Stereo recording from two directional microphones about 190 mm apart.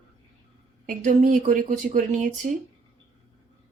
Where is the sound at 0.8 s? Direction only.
45° right (ahead or behind).